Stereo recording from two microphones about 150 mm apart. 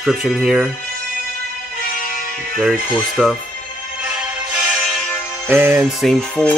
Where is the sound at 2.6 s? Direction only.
Centre (ahead or behind).